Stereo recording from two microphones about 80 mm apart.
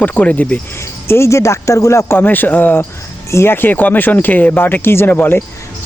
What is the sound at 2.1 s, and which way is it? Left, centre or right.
Speech, left.